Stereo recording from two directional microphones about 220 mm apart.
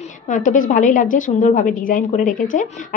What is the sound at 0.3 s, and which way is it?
Speech, 35° left (ahead or behind).